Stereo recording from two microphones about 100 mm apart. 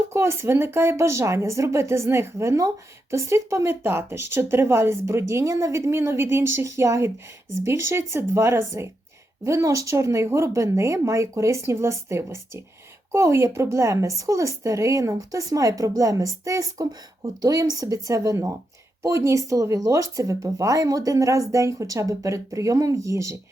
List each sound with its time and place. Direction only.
0.1 s speech: 25° right (ahead or behind)